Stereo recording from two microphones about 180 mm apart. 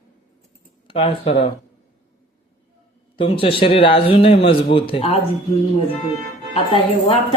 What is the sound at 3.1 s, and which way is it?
A man's voice, 30° left (ahead or behind).